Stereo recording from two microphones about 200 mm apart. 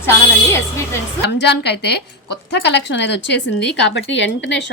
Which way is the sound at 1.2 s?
55° left (ahead or behind).